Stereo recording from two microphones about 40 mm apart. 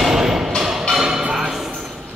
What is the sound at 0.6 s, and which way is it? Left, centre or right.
Music, centre.